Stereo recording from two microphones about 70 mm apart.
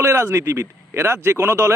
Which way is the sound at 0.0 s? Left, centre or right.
Right.